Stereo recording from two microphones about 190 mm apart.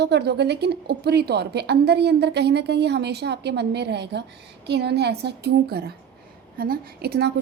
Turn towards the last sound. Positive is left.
turn(degrees=-55)  # may be behind; listen again after turning